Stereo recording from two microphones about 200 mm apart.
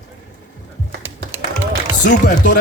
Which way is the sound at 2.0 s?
40° left (ahead or behind).